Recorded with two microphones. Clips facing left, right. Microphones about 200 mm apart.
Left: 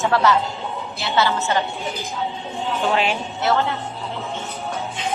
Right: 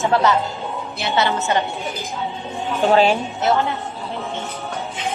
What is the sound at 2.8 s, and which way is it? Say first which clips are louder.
Speech: right 7 dB; 35° right (ahead or behind).